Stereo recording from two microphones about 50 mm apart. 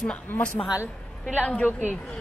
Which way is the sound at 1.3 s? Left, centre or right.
Left.